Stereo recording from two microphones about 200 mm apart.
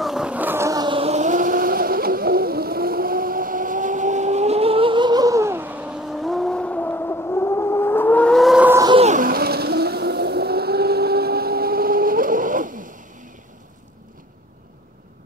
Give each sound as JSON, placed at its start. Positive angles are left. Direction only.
{"t": 0.0, "sound": "vehicle", "side_deg": -5}
{"t": 8.8, "sound": "vehicle", "side_deg": -30}